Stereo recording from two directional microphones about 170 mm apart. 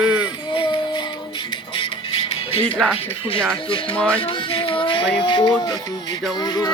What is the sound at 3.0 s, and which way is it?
Speech, 35° left (ahead or behind).